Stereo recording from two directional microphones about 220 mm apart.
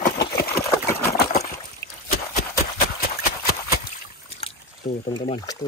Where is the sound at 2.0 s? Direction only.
40° left (ahead or behind).